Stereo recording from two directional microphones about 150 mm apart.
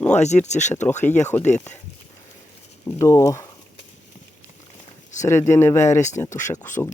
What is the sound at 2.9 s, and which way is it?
Speech, 20° left (ahead or behind).